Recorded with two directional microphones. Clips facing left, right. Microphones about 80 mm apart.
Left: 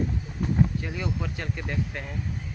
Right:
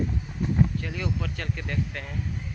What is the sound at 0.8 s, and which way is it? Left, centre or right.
Speech, centre.